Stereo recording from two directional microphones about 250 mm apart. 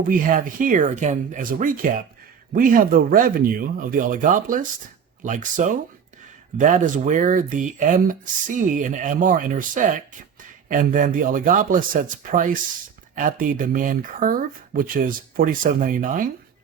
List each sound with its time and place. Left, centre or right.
0.1 s speech: right